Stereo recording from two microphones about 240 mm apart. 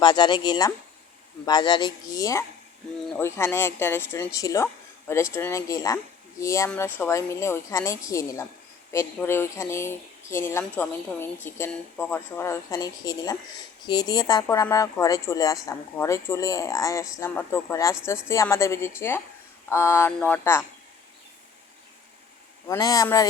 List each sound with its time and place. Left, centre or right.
0.0 s speech: centre
22.6 s speech: centre